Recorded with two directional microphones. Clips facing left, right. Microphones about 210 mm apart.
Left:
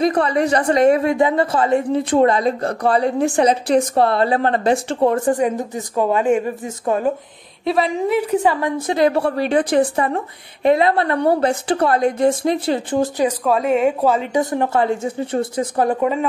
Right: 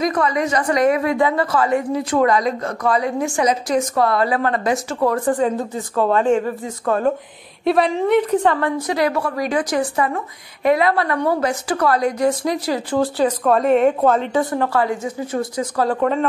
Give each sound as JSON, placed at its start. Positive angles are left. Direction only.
{"t": 0.0, "sound": "a woman's voice", "side_deg": 30}
{"t": 8.8, "sound": "a woman's voice", "side_deg": 25}
{"t": 13.5, "sound": "a woman's voice", "side_deg": 0}
{"t": 14.3, "sound": "a woman's voice", "side_deg": 20}
{"t": 16.0, "sound": "a woman's voice", "side_deg": 5}